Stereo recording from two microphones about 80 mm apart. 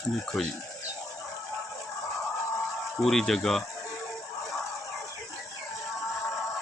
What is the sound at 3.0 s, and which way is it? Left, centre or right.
Speech, centre.